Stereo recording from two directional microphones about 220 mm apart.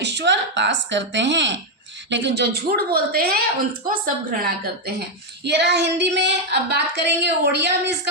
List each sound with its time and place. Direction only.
0.0 s a woman's voice: 50° right (ahead or behind)